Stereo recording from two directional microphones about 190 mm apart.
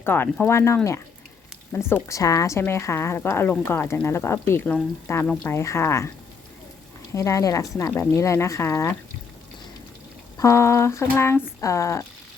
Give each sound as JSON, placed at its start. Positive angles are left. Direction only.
{"t": 0.0, "sound": "speech", "side_deg": 10}
{"t": 7.1, "sound": "speech", "side_deg": 15}
{"t": 10.3, "sound": "speech", "side_deg": 15}